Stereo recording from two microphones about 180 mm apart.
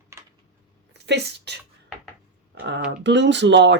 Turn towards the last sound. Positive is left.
turn(degrees=-80)